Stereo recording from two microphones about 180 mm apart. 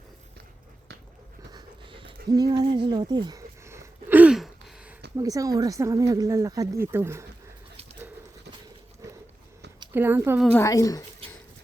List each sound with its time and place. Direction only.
1.5 s pant: 30° right (ahead or behind)
2.3 s a sound: 20° right (ahead or behind); by 4.4 s 5° right (ahead or behind)
5.1 s speech: 20° right (ahead or behind)
9.9 s speech: 10° right (ahead or behind)
10.6 s speech: 20° left (ahead or behind)